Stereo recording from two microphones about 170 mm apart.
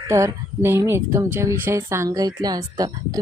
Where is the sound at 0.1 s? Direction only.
15° right (ahead or behind).